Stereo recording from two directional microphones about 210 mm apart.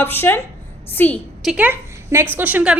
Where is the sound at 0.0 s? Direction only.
10° left (ahead or behind).